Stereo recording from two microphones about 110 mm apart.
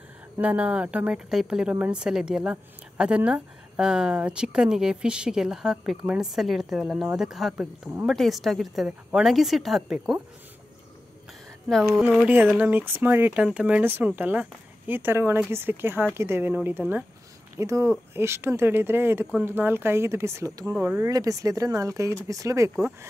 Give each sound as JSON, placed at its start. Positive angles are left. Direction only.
{"t": 0.4, "sound": "a woman's voice", "side_deg": -10}
{"t": 12.2, "sound": "speech", "side_deg": -15}
{"t": 20.7, "sound": "speech", "side_deg": -15}
{"t": 21.0, "sound": "speech", "side_deg": -30}